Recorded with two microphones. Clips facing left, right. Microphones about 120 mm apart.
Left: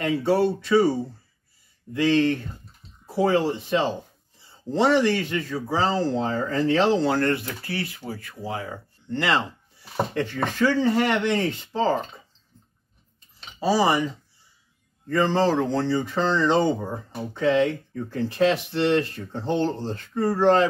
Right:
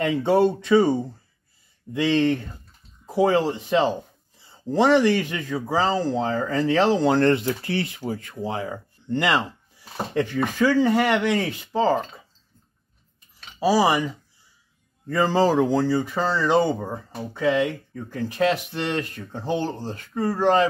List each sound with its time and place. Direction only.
0.0 s speech: 20° right (ahead or behind)
13.6 s speech: 10° right (ahead or behind)
15.0 s speech: 10° right (ahead or behind)